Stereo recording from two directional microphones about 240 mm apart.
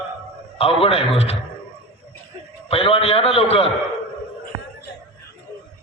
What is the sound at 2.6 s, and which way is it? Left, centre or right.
A man's voice, left.